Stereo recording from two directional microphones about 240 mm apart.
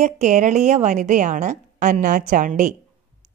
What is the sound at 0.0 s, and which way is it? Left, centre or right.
A woman's voice, right.